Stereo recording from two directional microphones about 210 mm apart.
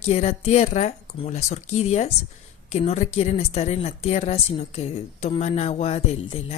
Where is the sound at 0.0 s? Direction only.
30° left (ahead or behind).